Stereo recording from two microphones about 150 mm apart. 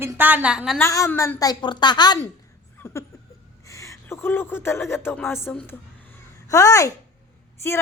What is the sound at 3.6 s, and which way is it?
A woman's voice, 20° left (ahead or behind).